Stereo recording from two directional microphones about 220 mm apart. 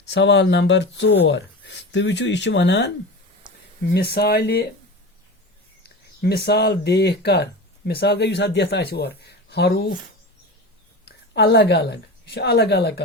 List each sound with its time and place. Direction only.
0.1 s speech: 55° left (ahead or behind)
3.9 s speech: 45° left (ahead or behind)
6.2 s speech: 45° left (ahead or behind)
11.0 s a woman's voice: 45° left (ahead or behind)